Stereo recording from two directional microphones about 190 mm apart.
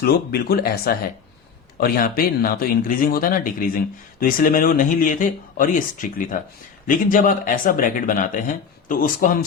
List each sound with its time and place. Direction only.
0.0 s speech: 55° left (ahead or behind)